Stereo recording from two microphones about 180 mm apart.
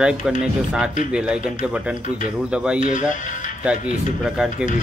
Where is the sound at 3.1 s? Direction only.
45° left (ahead or behind).